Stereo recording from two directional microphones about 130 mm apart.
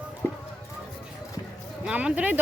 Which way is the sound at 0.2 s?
15° left (ahead or behind).